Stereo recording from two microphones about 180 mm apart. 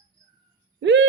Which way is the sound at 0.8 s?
80° right.